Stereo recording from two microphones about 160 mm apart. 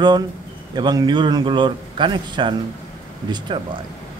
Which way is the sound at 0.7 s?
25° right (ahead or behind).